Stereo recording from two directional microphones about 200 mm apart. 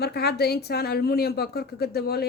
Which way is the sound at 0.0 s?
55° left (ahead or behind).